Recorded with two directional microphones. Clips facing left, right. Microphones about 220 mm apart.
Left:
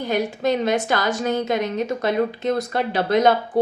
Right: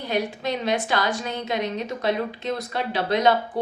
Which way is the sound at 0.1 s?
50° left (ahead or behind).